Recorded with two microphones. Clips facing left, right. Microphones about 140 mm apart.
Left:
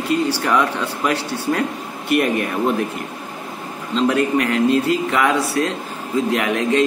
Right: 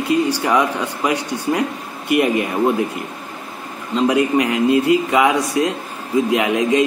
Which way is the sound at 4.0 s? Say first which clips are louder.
Right 2 dB; 10° right (ahead or behind).